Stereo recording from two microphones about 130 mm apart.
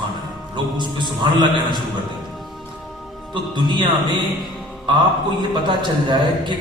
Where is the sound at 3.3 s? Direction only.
35° right (ahead or behind).